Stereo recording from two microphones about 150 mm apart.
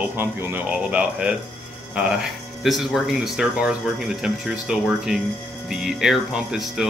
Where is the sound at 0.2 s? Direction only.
15° right (ahead or behind).